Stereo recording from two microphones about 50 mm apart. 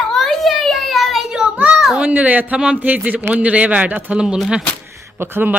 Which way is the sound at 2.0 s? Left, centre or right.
Right.